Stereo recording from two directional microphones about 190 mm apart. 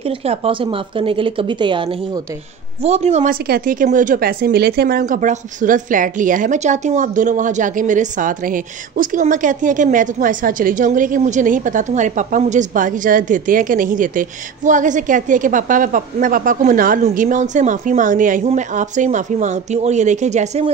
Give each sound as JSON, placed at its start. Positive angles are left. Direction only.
{"t": 0.0, "sound": "a woman's voice", "side_deg": -30}
{"t": 2.8, "sound": "a woman's voice", "side_deg": -35}
{"t": 3.4, "sound": "a woman's voice", "side_deg": -55}
{"t": 3.8, "sound": "a woman's voice", "side_deg": -45}